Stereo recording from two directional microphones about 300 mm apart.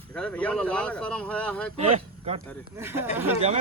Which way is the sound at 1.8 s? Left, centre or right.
Centre.